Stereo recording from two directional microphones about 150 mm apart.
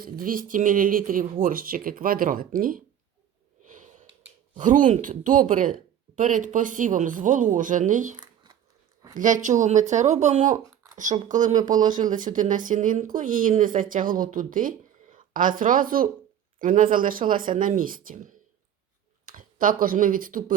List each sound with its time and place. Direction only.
0.0 s speech: 70° right (ahead or behind)
3.6 s a sound: 55° right (ahead or behind)
4.5 s speech: 60° right (ahead or behind)
9.1 s speech: 60° right (ahead or behind)
11.5 s speech: 25° right (ahead or behind)
12.0 s speech: 60° right (ahead or behind)